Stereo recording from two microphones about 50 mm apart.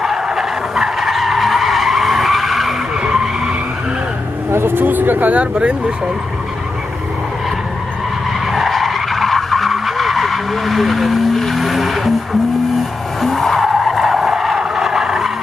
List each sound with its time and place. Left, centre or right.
0.0 s skidding: centre
4.5 s speech: right
8.5 s vehicle: centre
12.7 s skidding: centre